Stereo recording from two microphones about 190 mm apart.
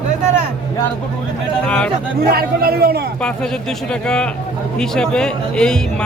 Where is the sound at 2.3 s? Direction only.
55° right (ahead or behind).